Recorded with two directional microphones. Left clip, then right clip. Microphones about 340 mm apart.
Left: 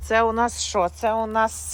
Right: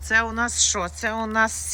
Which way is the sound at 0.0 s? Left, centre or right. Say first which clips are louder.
Left 2 dB; centre.